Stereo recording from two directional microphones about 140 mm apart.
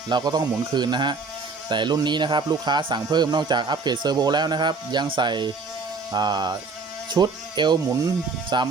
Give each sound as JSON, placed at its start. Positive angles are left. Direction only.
{"t": 0.1, "sound": "speech", "side_deg": -30}